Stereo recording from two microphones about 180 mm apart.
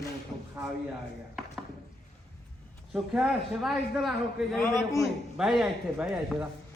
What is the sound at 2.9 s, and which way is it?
Speech, centre (ahead or behind).